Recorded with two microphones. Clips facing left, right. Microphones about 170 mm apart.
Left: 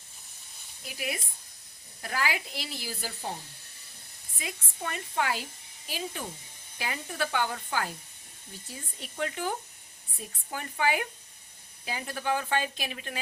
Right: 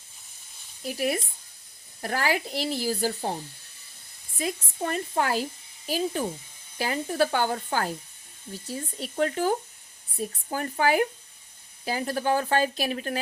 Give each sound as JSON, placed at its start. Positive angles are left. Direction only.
{"t": 0.9, "sound": "a woman's voice", "side_deg": -40}
{"t": 4.4, "sound": "a woman's voice", "side_deg": -40}